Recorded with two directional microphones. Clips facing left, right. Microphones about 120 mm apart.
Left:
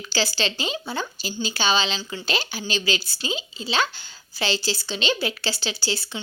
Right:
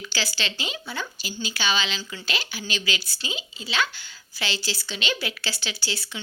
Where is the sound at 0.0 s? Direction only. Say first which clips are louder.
Left 5 dB; 30° left (ahead or behind).